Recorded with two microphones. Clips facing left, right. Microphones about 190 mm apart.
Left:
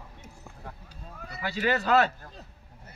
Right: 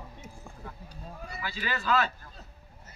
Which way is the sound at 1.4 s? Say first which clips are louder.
Left 8 dB; 65° left (ahead or behind).